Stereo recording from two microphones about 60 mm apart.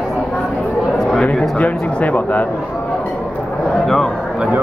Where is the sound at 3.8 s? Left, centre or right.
Centre.